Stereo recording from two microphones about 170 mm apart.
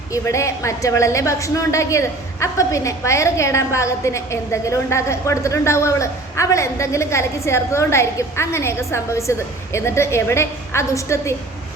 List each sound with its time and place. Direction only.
0.1 s a woman's voice: 20° left (ahead or behind)